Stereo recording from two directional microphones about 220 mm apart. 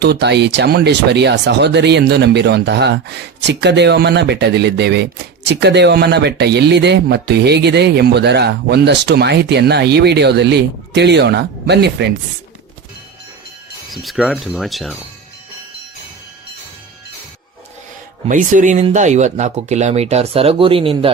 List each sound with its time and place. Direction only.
0.0 s speech: 50° right (ahead or behind)
13.9 s speech: centre (ahead or behind)
18.3 s speech: 35° right (ahead or behind)